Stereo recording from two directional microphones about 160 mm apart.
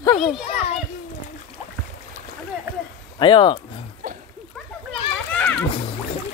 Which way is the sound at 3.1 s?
30° left (ahead or behind).